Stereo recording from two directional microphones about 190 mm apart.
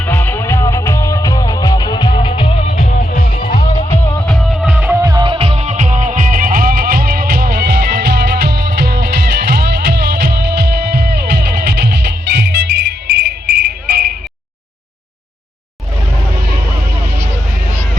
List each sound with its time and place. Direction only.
0.0 s music: 10° left (ahead or behind); by 2.5 s 25° left (ahead or behind)
2.6 s music: 45° left (ahead or behind)
4.3 s music: centre (ahead or behind); by 12.8 s 65° right (ahead or behind)
13.5 s cricket: 55° right (ahead or behind)